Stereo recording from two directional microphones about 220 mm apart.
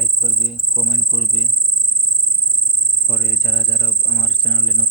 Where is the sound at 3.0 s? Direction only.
Centre (ahead or behind).